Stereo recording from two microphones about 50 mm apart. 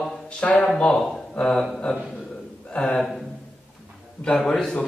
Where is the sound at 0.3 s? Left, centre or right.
Left.